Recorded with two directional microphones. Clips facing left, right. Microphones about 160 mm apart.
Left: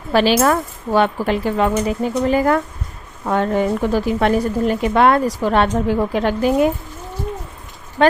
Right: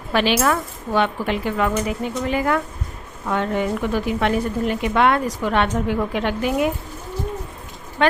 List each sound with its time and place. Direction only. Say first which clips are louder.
0.1 s speech: left 4 dB; 35° left (ahead or behind)